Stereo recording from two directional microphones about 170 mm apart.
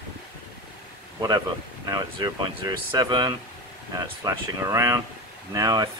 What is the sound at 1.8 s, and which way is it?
Speech, 20° right (ahead or behind).